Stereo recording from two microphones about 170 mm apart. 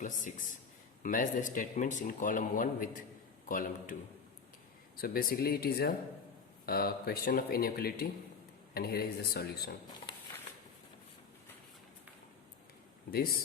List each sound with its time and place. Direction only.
0.0 s speech: 50° left (ahead or behind)
4.9 s speech: 60° left (ahead or behind)
13.1 s speech: 60° left (ahead or behind)